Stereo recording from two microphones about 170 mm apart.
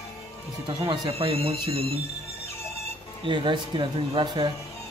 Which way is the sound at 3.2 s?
30° right (ahead or behind).